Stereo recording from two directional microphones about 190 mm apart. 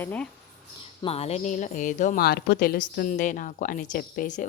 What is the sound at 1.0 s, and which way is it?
A woman's voice, 35° left (ahead or behind).